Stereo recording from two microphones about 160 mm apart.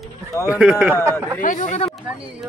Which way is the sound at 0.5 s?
5° right (ahead or behind).